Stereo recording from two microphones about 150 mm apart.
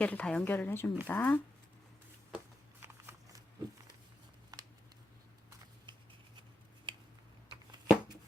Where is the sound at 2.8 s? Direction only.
15° right (ahead or behind).